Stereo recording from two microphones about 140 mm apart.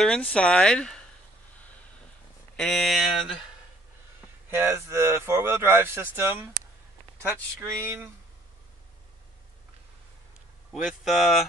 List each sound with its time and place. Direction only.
0.0 s speech: 5° left (ahead or behind)
2.5 s speech: 5° left (ahead or behind)
4.5 s speech: 15° right (ahead or behind)
10.7 s speech: centre (ahead or behind)